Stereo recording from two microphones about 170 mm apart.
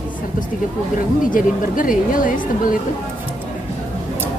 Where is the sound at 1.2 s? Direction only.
55° left (ahead or behind).